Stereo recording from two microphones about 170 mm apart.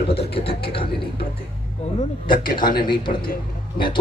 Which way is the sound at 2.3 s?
55° left (ahead or behind).